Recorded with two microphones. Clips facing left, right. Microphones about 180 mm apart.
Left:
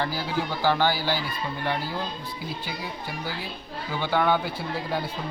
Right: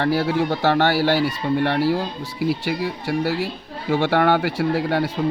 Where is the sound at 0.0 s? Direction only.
70° right (ahead or behind).